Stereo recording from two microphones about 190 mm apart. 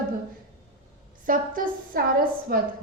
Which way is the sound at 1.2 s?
45° right (ahead or behind).